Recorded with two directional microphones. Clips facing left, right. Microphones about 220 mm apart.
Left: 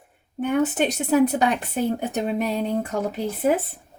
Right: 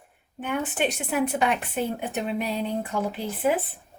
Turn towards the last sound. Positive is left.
turn(degrees=40)  # may be behind; listen again after turning